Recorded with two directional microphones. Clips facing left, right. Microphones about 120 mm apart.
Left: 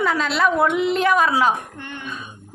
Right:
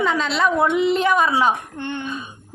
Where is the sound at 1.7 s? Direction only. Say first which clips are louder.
Right 7 dB; 30° right (ahead or behind).